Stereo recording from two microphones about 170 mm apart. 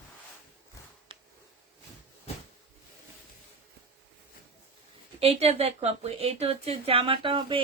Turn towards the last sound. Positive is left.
turn(degrees=-30)  # may be behind; listen again after turning